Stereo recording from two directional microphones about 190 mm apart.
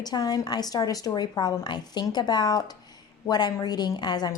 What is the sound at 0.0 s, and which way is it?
A woman's voice, 20° left (ahead or behind).